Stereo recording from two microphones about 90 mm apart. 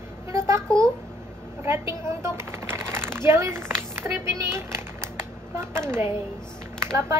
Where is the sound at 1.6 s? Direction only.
30° right (ahead or behind).